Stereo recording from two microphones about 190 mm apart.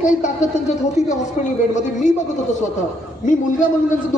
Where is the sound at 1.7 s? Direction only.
40° left (ahead or behind).